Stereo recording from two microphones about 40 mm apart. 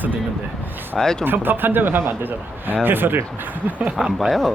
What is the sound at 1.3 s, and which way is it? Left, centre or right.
Speech, right.